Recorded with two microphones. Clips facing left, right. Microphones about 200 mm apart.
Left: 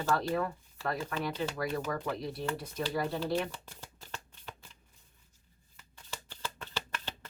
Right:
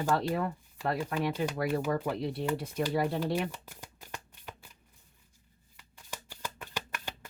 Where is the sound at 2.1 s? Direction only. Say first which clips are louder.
Right 3 dB; 30° right (ahead or behind).